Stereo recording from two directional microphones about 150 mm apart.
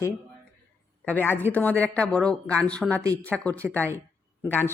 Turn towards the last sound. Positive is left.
turn(degrees=15)  # may be behind; listen again after turning